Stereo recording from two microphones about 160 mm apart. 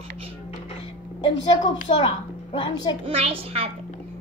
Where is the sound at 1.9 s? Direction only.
55° left (ahead or behind).